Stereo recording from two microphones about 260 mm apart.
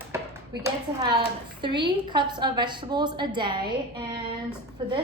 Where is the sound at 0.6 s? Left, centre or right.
Centre.